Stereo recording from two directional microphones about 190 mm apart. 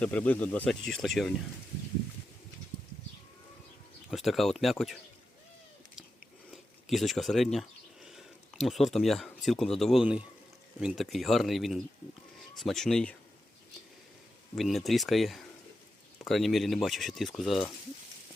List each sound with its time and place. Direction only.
0.0 s speech: 10° left (ahead or behind)
4.1 s speech: centre (ahead or behind)
6.8 s speech: centre (ahead or behind)
14.5 s speech: centre (ahead or behind)